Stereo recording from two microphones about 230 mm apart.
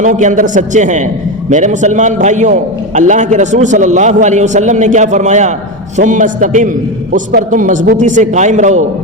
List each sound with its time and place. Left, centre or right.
0.0 s a man's voice: right